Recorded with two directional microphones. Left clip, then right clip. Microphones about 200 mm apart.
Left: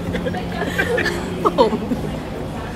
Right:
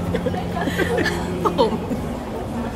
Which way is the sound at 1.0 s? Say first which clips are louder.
Left 1 dB; centre (ahead or behind).